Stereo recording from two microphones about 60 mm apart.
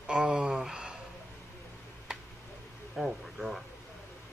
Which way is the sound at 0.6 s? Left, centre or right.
Centre.